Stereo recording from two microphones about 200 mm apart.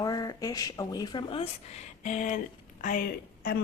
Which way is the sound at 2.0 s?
40° left (ahead or behind).